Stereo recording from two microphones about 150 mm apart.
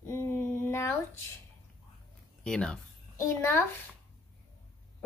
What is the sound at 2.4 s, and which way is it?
Speech, 5° left (ahead or behind).